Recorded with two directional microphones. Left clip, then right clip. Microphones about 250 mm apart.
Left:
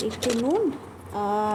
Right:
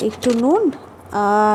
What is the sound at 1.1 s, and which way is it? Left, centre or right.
Speech, right.